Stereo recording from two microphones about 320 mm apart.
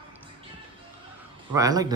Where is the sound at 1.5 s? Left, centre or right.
Centre.